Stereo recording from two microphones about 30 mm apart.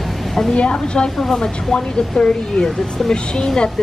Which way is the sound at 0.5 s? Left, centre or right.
Left.